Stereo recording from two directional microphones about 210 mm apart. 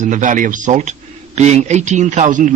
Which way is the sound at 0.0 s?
35° right (ahead or behind).